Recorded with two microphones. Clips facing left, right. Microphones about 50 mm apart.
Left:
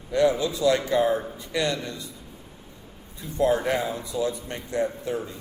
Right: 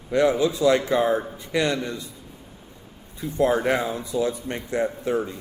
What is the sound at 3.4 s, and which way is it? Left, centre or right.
Speech, right.